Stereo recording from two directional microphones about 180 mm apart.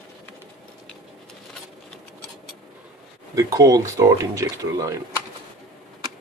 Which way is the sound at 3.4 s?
20° right (ahead or behind).